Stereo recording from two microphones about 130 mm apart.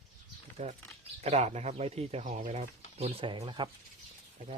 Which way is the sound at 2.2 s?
75° right (ahead or behind).